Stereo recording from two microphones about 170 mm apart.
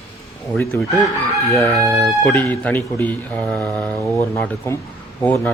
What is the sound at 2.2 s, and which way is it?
Speech, 15° left (ahead or behind).